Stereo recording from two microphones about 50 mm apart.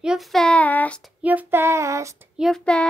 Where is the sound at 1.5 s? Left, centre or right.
Right.